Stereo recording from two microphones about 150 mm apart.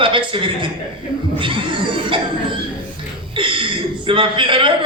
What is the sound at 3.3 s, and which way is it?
A man's voice, 35° right (ahead or behind).